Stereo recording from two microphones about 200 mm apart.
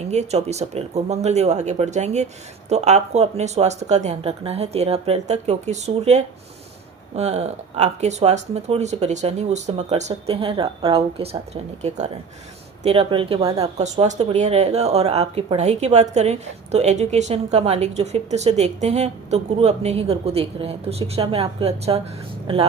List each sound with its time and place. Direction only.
0.0 s speech: 35° right (ahead or behind)